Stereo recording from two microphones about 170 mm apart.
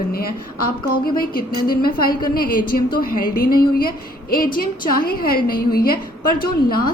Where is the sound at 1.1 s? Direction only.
60° left (ahead or behind).